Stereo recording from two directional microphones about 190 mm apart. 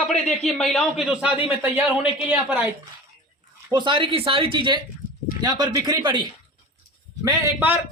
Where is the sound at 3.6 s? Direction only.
25° right (ahead or behind).